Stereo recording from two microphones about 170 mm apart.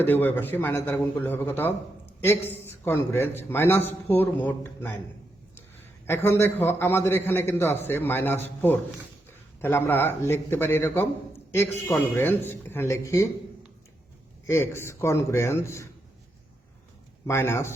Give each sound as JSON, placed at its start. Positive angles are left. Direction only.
{"t": 0.0, "sound": "a man's voice", "side_deg": 10}
{"t": 6.1, "sound": "a man's voice", "side_deg": 15}
{"t": 14.4, "sound": "a man's voice", "side_deg": 15}
{"t": 17.2, "sound": "a man's voice", "side_deg": 15}